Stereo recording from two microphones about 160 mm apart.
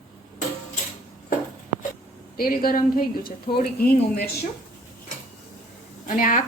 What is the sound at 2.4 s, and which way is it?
A woman's voice, 65° left (ahead or behind).